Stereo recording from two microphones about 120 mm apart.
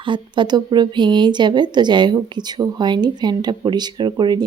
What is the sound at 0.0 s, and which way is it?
Speech, 40° right (ahead or behind).